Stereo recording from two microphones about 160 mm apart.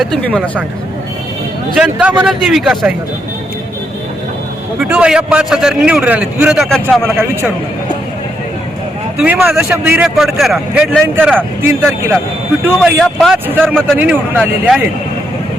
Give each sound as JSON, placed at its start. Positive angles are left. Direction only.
{"t": 0.0, "sound": "speech", "side_deg": 5}
{"t": 1.7, "sound": "speech", "side_deg": -5}
{"t": 4.8, "sound": "a man's voice", "side_deg": -10}
{"t": 9.2, "sound": "a man's voice", "side_deg": -5}
{"t": 11.0, "sound": "a man's voice", "side_deg": -15}
{"t": 14.0, "sound": "a man's voice", "side_deg": -10}